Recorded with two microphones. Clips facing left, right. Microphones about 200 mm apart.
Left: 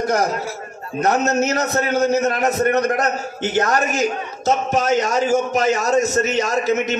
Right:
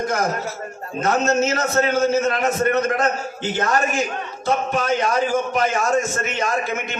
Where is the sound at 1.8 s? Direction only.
40° left (ahead or behind).